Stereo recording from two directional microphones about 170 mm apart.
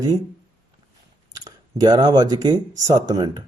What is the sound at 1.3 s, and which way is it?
Speech, 20° right (ahead or behind).